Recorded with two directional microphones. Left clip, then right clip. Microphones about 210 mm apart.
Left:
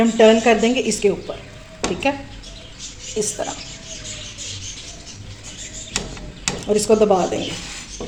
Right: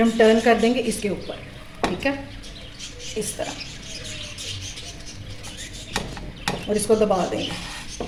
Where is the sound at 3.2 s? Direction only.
30° left (ahead or behind).